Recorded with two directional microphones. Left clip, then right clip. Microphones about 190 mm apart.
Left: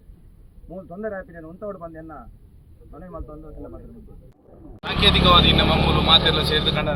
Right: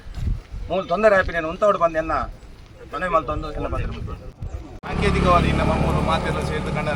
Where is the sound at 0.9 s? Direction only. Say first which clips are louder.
Right 15 dB; 20° right (ahead or behind).